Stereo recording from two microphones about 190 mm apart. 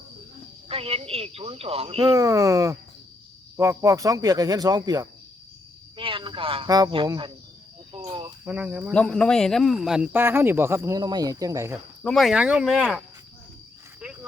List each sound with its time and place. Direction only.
0.7 s speech: 30° right (ahead or behind)
2.1 s speech: 15° right (ahead or behind)
7.9 s cricket: 25° right (ahead or behind)
8.4 s speech: 5° right (ahead or behind)
8.9 s speech: 5° left (ahead or behind); by 11.8 s 15° right (ahead or behind)
12.0 s speech: centre (ahead or behind)
14.0 s a sound: 5° right (ahead or behind)